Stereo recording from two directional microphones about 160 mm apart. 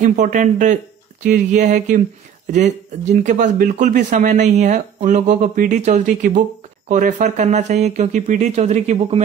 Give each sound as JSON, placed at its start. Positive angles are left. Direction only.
{"t": 0.0, "sound": "speech", "side_deg": -50}